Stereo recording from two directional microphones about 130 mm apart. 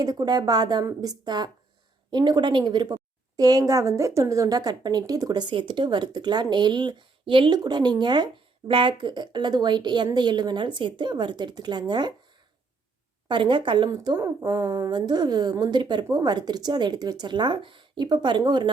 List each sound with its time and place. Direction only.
0.0 s a woman's voice: 30° right (ahead or behind)
13.2 s a woman's voice: 40° right (ahead or behind)